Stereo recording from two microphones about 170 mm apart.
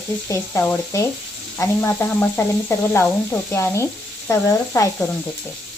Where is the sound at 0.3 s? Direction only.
10° left (ahead or behind).